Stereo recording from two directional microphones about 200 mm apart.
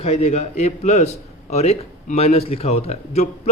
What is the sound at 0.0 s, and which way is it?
A man's voice, 30° left (ahead or behind).